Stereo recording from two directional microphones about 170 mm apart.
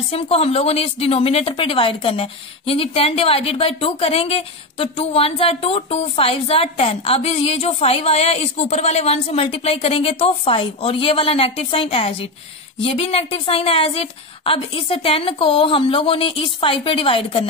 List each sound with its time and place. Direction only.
0.1 s a woman's voice: 35° left (ahead or behind)